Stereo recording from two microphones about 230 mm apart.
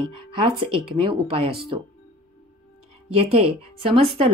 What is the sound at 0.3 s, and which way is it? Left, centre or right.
A woman's voice, right.